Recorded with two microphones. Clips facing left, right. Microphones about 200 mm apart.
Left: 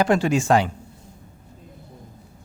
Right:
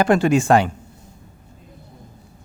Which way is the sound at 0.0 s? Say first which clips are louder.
Right 3 dB; 60° right (ahead or behind).